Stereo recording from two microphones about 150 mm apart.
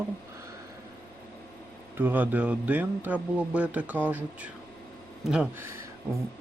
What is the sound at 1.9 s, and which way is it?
A man's voice, 15° right (ahead or behind).